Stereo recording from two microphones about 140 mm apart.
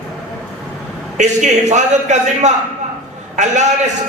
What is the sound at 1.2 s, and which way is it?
A man's voice, 60° right (ahead or behind).